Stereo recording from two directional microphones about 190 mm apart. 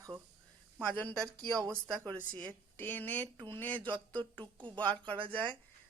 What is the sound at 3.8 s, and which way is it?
Speech, 25° right (ahead or behind).